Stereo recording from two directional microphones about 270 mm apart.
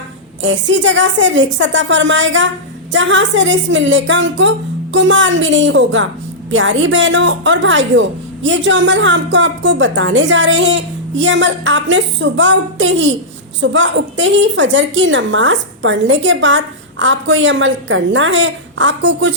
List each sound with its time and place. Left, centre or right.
0.4 s a woman's voice: right